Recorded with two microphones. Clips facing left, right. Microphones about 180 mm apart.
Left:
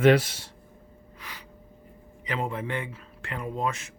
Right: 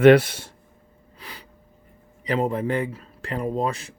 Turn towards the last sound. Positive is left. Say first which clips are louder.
# right 5 dB
turn(degrees=-35)  # may be behind; listen again after turning